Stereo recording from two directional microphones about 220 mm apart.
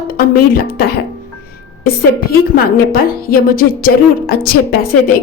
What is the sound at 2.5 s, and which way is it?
A woman's voice, 40° left (ahead or behind).